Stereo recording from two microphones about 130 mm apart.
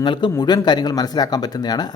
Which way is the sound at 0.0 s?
35° left (ahead or behind).